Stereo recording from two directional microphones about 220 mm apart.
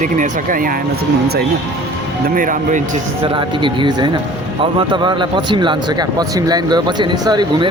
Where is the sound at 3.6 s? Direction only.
20° right (ahead or behind).